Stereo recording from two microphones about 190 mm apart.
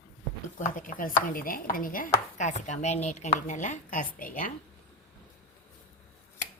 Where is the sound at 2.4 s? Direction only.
40° left (ahead or behind).